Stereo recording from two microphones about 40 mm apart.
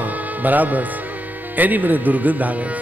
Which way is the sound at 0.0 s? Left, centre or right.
Right.